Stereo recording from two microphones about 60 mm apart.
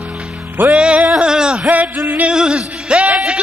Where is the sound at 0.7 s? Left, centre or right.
Centre.